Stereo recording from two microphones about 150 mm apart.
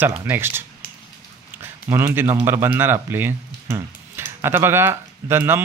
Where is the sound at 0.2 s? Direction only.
15° right (ahead or behind).